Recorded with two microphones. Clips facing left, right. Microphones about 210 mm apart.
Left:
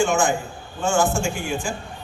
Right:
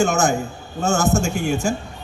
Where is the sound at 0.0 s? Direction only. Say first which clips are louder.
Right 2 dB; 45° right (ahead or behind).